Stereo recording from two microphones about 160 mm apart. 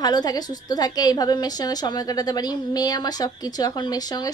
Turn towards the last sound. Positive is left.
turn(degrees=25)  # may be behind; listen again after turning